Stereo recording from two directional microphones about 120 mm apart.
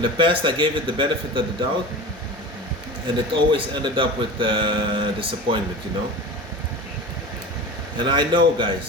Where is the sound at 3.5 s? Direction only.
45° right (ahead or behind).